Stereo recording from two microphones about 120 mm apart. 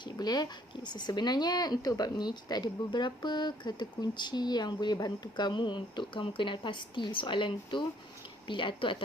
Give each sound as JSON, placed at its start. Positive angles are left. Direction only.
{"t": 0.0, "sound": "speech", "side_deg": 35}